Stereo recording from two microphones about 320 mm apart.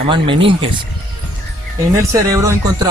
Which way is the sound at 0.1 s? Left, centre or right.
Centre.